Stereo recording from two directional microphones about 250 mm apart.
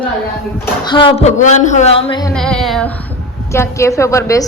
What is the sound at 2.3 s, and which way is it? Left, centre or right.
Speech, centre.